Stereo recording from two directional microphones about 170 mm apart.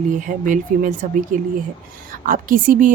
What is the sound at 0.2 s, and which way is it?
A woman's voice, 50° right (ahead or behind).